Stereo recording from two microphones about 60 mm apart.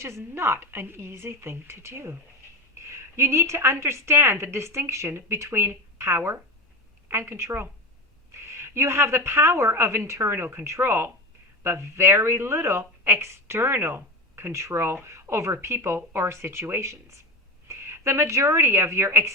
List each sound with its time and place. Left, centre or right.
0.0 s a woman's voice: right